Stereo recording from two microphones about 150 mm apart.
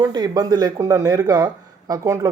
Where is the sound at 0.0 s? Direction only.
25° right (ahead or behind).